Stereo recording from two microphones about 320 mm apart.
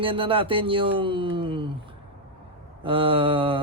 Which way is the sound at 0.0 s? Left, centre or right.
Centre.